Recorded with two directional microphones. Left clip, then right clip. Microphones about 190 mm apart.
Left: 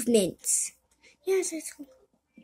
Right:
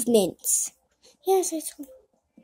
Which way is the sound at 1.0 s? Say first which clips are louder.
Right 5 dB; 10° right (ahead or behind).